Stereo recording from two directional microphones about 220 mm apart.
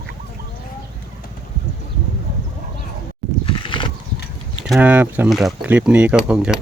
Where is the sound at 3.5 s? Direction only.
20° left (ahead or behind).